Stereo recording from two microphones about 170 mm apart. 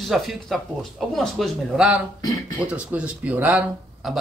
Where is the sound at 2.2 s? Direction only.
25° left (ahead or behind).